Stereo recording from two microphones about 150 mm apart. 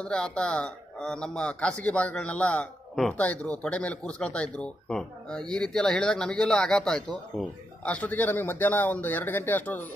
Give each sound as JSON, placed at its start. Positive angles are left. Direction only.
{"t": 0.0, "sound": "speech", "side_deg": 5}